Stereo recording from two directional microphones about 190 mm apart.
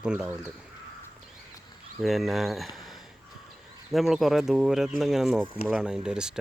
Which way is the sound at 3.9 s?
Centre (ahead or behind).